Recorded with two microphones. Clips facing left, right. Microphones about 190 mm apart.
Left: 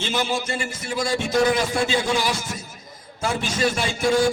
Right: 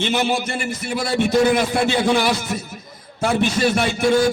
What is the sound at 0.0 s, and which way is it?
A man's voice, 65° right (ahead or behind).